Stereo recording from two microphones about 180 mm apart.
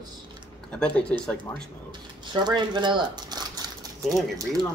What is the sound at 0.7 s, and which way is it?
Speech, 5° left (ahead or behind).